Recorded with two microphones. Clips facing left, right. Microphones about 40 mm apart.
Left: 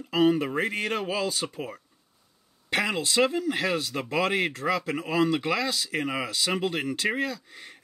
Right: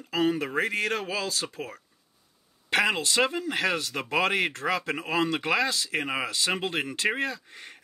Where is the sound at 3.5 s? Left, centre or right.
Right.